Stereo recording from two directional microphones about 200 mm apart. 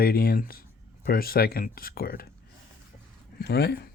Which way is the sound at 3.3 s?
55° left (ahead or behind).